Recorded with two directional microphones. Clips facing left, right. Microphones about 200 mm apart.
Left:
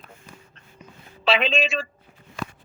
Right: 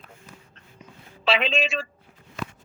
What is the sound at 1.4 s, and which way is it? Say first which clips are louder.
Speech: left 2 dB; 55° left (ahead or behind).